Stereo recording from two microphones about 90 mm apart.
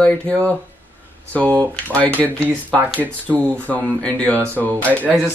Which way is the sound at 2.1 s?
20° right (ahead or behind).